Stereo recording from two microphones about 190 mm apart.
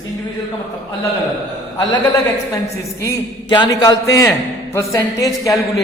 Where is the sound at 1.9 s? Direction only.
20° left (ahead or behind).